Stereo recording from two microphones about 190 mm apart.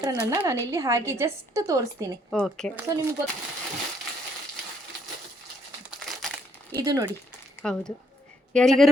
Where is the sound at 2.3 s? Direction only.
Centre (ahead or behind).